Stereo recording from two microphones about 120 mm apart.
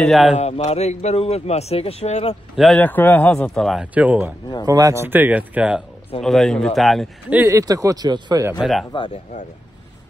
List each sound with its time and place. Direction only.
0.0 s speech: centre (ahead or behind)
0.4 s a man's voice: 65° left (ahead or behind)
2.5 s a man's voice: centre (ahead or behind)
2.8 s speech: 15° left (ahead or behind)
3.8 s speech: 10° right (ahead or behind)
4.6 s speech: 30° right (ahead or behind); by 5.9 s 10° right (ahead or behind)
6.2 s speech: 5° left (ahead or behind)
7.4 s speech: 30° right (ahead or behind)
8.5 s speech: centre (ahead or behind)